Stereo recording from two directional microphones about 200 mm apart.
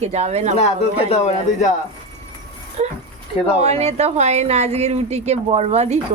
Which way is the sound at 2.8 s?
35° right (ahead or behind).